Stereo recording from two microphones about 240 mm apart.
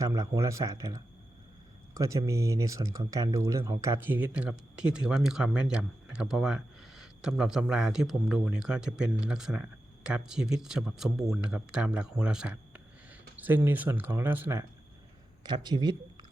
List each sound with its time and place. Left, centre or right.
0.0 s speech: centre